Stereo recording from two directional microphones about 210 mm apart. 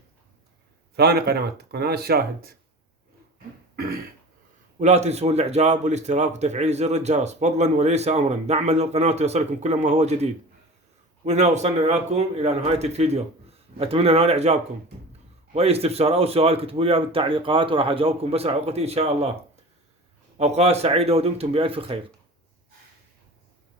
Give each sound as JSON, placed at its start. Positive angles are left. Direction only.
{"t": 0.9, "sound": "speech", "side_deg": -50}
{"t": 4.8, "sound": "speech", "side_deg": -30}
{"t": 11.3, "sound": "speech", "side_deg": -35}
{"t": 20.4, "sound": "speech", "side_deg": -30}